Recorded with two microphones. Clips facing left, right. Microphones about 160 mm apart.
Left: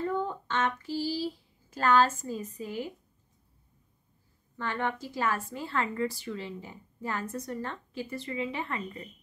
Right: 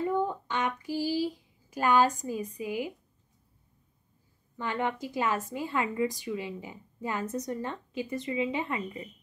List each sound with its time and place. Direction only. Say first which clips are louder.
0.0 s speech: right 2 dB; 15° right (ahead or behind)
4.6 s a woman's voice: right 1 dB; 15° right (ahead or behind)